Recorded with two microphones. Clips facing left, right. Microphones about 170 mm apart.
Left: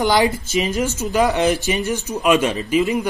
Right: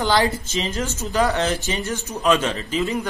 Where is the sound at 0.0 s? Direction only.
15° left (ahead or behind).